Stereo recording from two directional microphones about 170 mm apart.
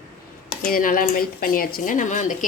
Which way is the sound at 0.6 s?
55° left (ahead or behind).